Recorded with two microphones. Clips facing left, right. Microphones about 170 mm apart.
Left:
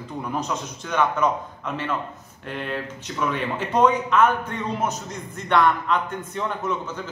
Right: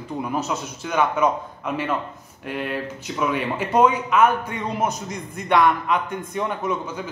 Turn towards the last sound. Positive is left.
turn(degrees=-10)  # may be behind; listen again after turning